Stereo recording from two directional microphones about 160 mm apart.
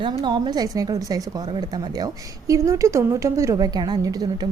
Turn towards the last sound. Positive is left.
turn(degrees=-25)  # may be behind; listen again after turning